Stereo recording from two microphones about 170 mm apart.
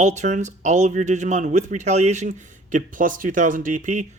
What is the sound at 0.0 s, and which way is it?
Speech, 45° right (ahead or behind).